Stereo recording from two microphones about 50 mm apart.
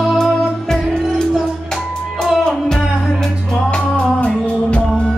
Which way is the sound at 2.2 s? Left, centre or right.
Centre.